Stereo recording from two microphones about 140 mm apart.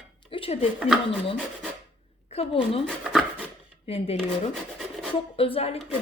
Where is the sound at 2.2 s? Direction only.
45° left (ahead or behind).